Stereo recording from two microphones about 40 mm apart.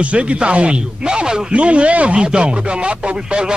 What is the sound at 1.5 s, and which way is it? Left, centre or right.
Speech, right.